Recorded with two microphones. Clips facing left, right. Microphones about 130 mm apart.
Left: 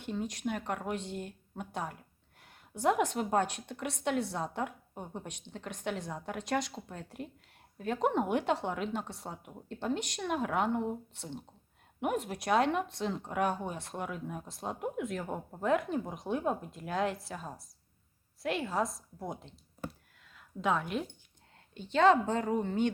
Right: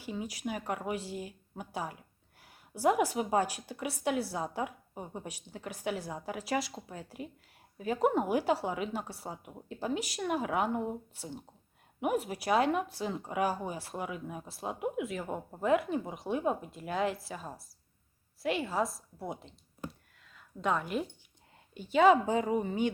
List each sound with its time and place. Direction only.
0.0 s a woman's voice: 5° right (ahead or behind)